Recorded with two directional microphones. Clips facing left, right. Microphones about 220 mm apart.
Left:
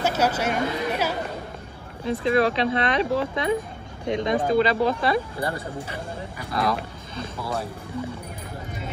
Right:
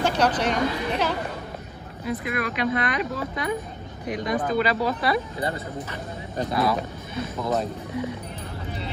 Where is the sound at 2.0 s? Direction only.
30° left (ahead or behind).